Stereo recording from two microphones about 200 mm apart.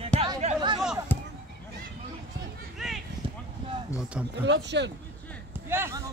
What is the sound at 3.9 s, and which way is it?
Speech, 5° right (ahead or behind).